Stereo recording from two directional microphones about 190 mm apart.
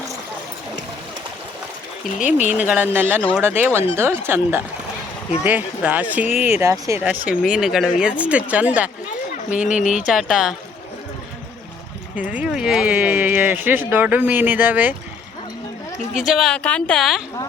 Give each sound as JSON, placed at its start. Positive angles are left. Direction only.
{"t": 2.6, "sound": "speech", "side_deg": -10}
{"t": 9.6, "sound": "speech", "side_deg": 40}
{"t": 10.1, "sound": "speech", "side_deg": 0}
{"t": 12.1, "sound": "speech", "side_deg": -5}
{"t": 16.1, "sound": "speech", "side_deg": 0}